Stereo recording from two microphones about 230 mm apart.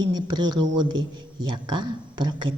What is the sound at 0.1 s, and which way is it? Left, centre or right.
Speech, centre.